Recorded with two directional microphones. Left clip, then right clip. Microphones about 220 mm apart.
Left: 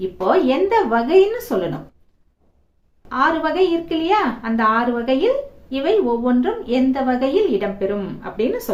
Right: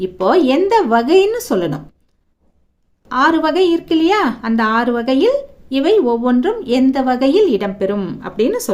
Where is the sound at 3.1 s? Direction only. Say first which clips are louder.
Right 4 dB; 50° right (ahead or behind).